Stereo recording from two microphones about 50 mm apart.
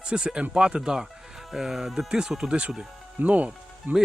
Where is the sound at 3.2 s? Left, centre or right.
Right.